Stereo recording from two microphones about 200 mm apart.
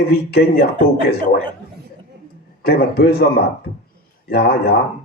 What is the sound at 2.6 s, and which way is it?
Speech, 50° left (ahead or behind).